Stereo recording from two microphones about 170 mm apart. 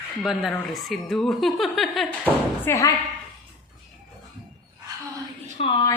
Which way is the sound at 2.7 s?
20° left (ahead or behind).